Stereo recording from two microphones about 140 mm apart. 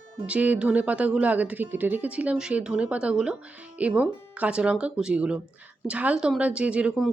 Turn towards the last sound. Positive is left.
turn(degrees=-5)  # may be behind; listen again after turning